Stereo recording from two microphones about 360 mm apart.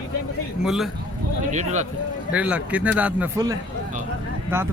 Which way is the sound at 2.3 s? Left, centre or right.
Centre.